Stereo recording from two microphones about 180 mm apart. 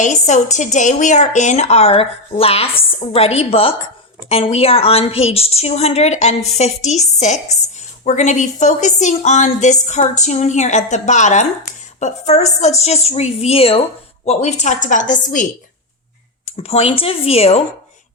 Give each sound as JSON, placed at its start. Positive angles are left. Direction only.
{"t": 0.0, "sound": "a woman's voice", "side_deg": 40}
{"t": 16.5, "sound": "speech", "side_deg": 35}